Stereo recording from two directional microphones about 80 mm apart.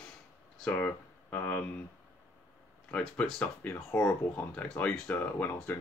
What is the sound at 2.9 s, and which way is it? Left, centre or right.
Speech, centre.